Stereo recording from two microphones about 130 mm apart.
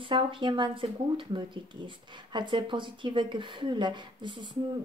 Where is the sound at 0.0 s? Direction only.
40° right (ahead or behind).